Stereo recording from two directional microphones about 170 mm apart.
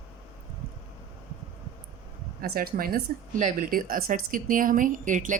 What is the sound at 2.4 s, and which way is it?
A woman's voice, 60° right (ahead or behind).